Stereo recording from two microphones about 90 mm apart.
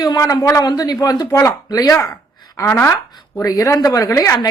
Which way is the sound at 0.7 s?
45° left (ahead or behind).